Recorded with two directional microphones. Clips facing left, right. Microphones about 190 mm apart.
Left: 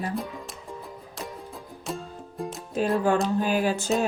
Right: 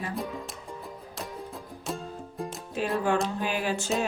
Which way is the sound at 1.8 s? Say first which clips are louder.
Left 1 dB; centre (ahead or behind).